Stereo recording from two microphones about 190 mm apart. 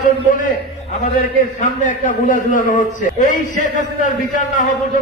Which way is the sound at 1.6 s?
45° left (ahead or behind).